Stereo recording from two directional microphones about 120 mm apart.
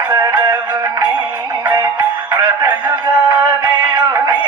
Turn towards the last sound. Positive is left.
turn(degrees=-40)  # may be behind; listen again after turning